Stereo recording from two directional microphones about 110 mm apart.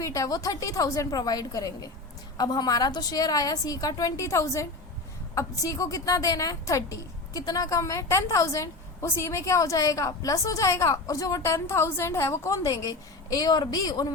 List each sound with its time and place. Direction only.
0.0 s a woman's voice: 30° left (ahead or behind)